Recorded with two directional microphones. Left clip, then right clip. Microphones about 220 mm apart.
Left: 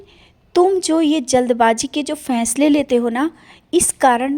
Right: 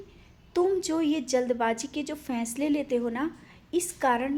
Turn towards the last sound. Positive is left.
turn(degrees=40)  # may be behind; listen again after turning